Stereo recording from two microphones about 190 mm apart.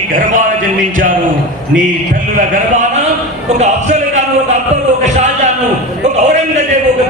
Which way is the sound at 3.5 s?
35° right (ahead or behind).